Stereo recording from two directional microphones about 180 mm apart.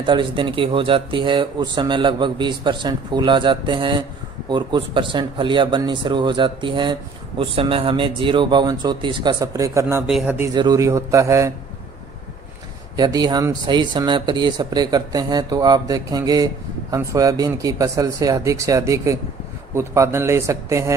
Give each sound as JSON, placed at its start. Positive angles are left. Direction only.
{"t": 0.0, "sound": "speech", "side_deg": -25}
{"t": 10.1, "sound": "a man's voice", "side_deg": 0}
{"t": 10.4, "sound": "speech", "side_deg": -20}
{"t": 13.0, "sound": "speech", "side_deg": -20}